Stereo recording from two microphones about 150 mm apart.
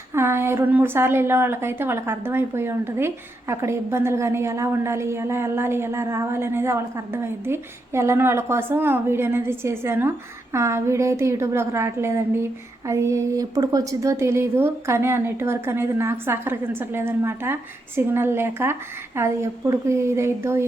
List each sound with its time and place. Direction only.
0.1 s a woman's voice: 15° right (ahead or behind)